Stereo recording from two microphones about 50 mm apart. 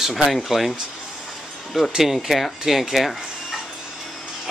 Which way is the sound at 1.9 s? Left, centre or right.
Centre.